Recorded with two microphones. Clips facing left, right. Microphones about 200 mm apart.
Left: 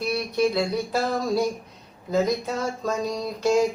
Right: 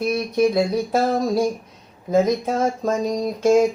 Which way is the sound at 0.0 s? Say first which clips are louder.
Right 4 dB; 50° right (ahead or behind).